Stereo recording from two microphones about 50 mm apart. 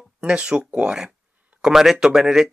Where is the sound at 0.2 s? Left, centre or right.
Centre.